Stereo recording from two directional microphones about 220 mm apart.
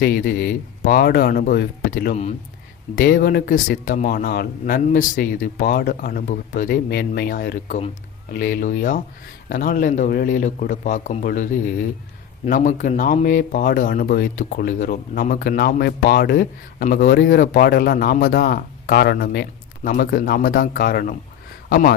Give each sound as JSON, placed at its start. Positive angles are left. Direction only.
{"t": 0.0, "sound": "speech", "side_deg": 45}